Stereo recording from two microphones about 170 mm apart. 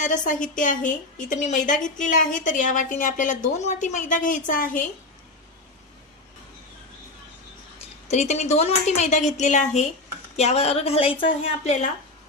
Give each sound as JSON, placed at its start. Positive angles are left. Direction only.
{"t": 0.0, "sound": "a woman's voice", "side_deg": 50}
{"t": 8.0, "sound": "a woman's voice", "side_deg": 40}